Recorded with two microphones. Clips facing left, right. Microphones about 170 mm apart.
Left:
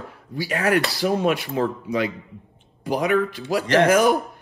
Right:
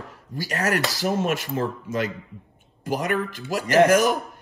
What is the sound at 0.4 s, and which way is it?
Speech, 40° right (ahead or behind).